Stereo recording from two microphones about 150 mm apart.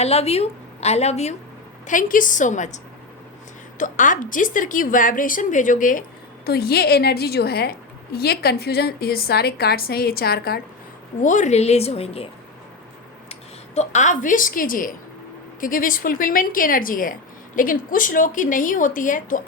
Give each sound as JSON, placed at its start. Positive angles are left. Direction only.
{"t": 0.0, "sound": "a woman's voice", "side_deg": 45}
{"t": 1.9, "sound": "a woman's voice", "side_deg": 60}
{"t": 6.4, "sound": "a woman's voice", "side_deg": 90}
{"t": 11.2, "sound": "a woman's voice", "side_deg": 55}
{"t": 13.7, "sound": "a woman's voice", "side_deg": 50}